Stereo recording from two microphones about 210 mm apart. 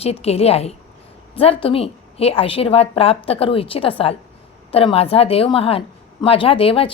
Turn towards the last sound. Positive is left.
turn(degrees=25)  # may be behind; listen again after turning